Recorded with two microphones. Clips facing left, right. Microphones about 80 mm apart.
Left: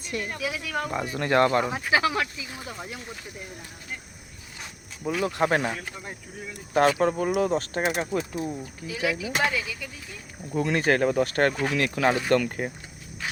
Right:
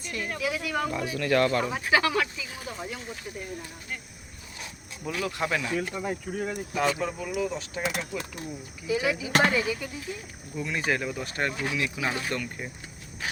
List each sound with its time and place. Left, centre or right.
0.3 s speech: centre
0.9 s speech: left
5.0 s speech: left
5.4 s speech: left
6.3 s speech: right
6.7 s speech: left
8.9 s speech: right
9.3 s speech: right
9.6 s speech: right
10.5 s speech: left